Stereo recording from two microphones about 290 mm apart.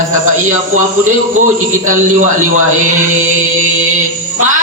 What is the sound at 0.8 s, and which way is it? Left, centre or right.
Speech, right.